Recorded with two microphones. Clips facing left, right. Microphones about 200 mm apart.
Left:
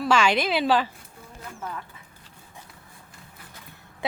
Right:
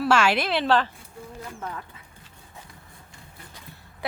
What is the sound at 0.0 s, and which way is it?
Speech, 5° right (ahead or behind).